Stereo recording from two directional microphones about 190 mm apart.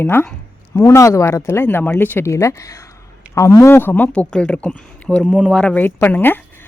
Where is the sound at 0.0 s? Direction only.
10° left (ahead or behind).